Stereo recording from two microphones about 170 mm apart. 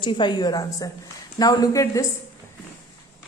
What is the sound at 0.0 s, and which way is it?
Speech, 25° left (ahead or behind).